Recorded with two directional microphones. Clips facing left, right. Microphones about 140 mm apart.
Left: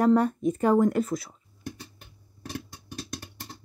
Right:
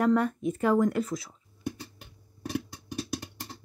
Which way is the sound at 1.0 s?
55° left (ahead or behind).